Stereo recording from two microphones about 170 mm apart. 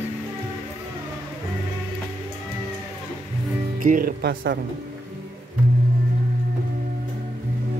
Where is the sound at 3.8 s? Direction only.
55° right (ahead or behind); by 4.5 s 75° right (ahead or behind).